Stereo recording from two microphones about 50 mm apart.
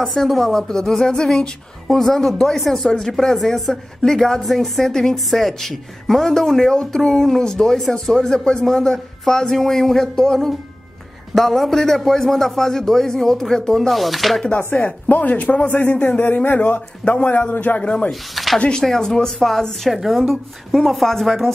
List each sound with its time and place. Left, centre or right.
0.0 s a woman's voice: centre
14.8 s a man's voice: left
18.3 s speech: centre
18.6 s a woman's voice: centre